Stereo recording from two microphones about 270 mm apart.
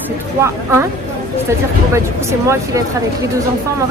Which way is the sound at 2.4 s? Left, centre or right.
Centre.